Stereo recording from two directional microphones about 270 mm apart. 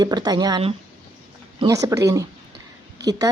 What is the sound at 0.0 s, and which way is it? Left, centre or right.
Speech, centre.